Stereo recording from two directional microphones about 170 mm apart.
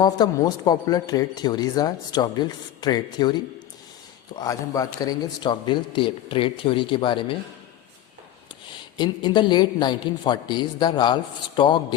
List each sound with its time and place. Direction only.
0.0 s speech: 25° left (ahead or behind)
9.0 s speech: 25° left (ahead or behind)